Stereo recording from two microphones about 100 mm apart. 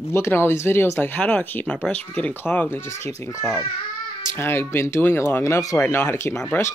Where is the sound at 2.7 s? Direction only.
25° left (ahead or behind).